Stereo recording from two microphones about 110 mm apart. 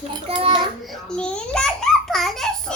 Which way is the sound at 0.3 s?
50° right (ahead or behind).